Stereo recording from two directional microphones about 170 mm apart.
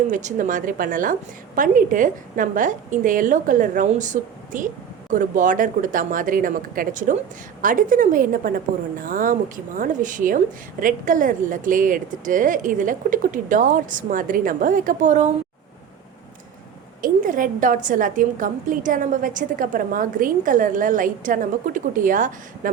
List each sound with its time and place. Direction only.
0.1 s a woman's voice: 45° right (ahead or behind)
17.0 s a woman's voice: 55° right (ahead or behind)